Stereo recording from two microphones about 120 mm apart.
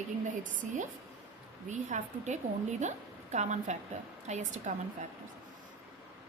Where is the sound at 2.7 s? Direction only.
75° right (ahead or behind).